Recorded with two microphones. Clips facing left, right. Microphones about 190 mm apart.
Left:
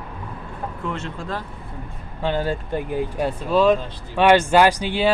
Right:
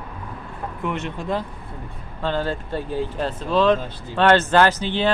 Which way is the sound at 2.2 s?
15° left (ahead or behind).